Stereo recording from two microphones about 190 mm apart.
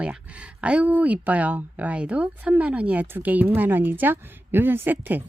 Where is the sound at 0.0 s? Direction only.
5° right (ahead or behind).